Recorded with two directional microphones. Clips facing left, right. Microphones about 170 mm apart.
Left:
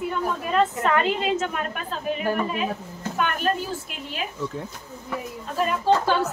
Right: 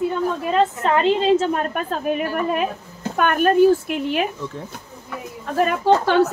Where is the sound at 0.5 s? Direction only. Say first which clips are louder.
Right 2 dB; 25° right (ahead or behind).